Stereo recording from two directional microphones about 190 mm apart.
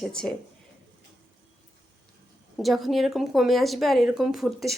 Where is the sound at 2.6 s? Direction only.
Centre (ahead or behind).